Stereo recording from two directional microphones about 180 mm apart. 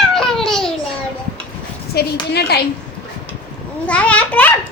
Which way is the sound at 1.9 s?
65° left (ahead or behind).